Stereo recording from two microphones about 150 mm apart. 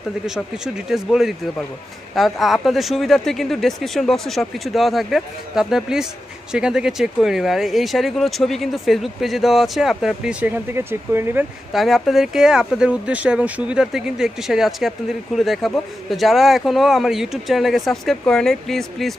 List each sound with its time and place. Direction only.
0.8 s speech: 5° right (ahead or behind)
10.7 s speech: 15° right (ahead or behind)
11.7 s speech: centre (ahead or behind)